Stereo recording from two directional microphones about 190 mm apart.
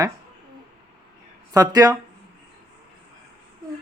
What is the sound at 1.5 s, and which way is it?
Speech, 20° right (ahead or behind).